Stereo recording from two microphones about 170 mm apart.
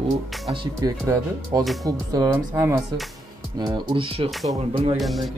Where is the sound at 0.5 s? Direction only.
20° right (ahead or behind).